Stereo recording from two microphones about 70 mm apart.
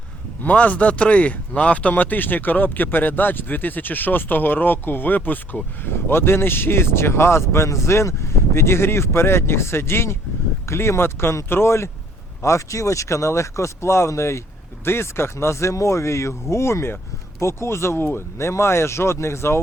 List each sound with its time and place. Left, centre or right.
0.4 s speech: left